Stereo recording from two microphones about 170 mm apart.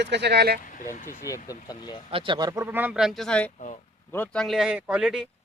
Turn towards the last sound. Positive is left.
turn(degrees=-5)  # may be behind; listen again after turning